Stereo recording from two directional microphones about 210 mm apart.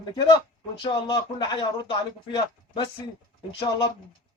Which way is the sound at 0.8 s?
20° left (ahead or behind).